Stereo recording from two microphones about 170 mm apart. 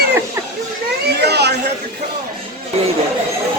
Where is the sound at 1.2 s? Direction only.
75° right (ahead or behind).